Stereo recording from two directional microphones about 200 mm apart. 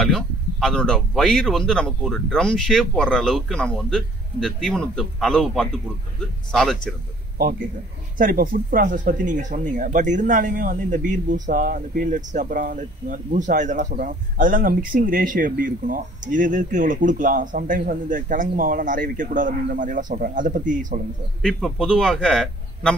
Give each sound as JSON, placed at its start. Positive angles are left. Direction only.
{"t": 0.0, "sound": "speech", "side_deg": 5}
{"t": 8.2, "sound": "speech", "side_deg": -45}
{"t": 21.4, "sound": "speech", "side_deg": 0}